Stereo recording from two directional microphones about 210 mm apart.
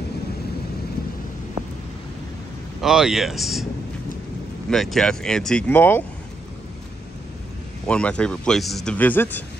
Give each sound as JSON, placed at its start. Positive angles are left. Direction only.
{"t": 2.8, "sound": "a man's voice", "side_deg": 0}
{"t": 4.6, "sound": "a man's voice", "side_deg": 0}
{"t": 7.8, "sound": "a man's voice", "side_deg": 5}